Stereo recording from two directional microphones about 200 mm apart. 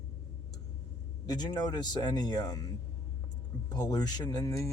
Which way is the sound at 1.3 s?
20° left (ahead or behind).